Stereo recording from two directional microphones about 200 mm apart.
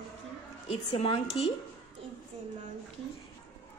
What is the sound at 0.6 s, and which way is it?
Speech, 30° left (ahead or behind).